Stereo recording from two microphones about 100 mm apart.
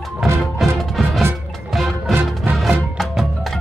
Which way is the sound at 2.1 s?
20° right (ahead or behind).